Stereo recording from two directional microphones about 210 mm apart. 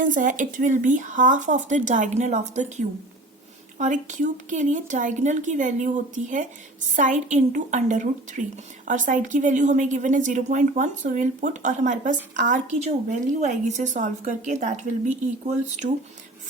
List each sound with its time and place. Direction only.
0.0 s a woman's voice: 40° right (ahead or behind)